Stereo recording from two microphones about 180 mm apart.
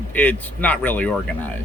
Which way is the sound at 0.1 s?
10° left (ahead or behind).